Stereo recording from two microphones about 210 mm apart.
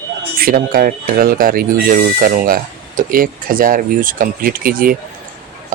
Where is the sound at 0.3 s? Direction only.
45° right (ahead or behind).